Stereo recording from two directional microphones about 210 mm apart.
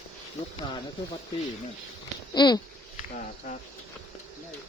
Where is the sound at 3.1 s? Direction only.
40° left (ahead or behind).